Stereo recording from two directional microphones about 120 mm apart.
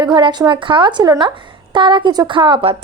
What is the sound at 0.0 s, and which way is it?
A woman's voice, 35° right (ahead or behind).